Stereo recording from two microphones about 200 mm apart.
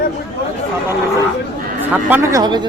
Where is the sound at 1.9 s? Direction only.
10° right (ahead or behind).